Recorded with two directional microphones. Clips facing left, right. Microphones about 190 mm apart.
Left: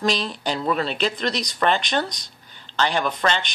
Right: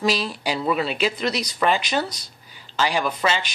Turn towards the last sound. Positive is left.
turn(degrees=-5)  # may be behind; listen again after turning